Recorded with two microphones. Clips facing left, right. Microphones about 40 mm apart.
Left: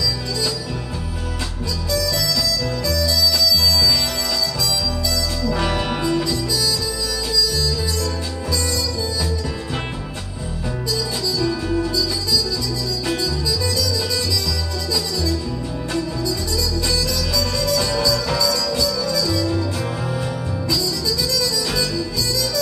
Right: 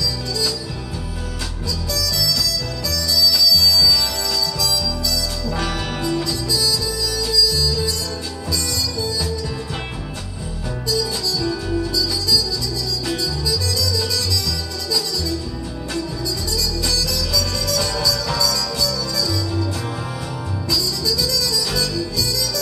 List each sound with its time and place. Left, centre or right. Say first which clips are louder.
2.0 s harmonica: left 1 dB; left
2.9 s music: right 1 dB; left
5.7 s music: left 3 dB; centre
10.9 s music: right 2 dB; centre
16.8 s music: left 1 dB; left
20.7 s music: right 1 dB; left